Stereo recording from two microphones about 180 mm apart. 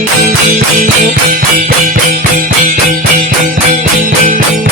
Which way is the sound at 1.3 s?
50° right (ahead or behind).